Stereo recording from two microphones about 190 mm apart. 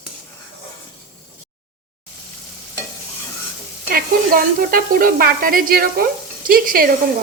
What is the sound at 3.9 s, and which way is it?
Speech, 50° right (ahead or behind).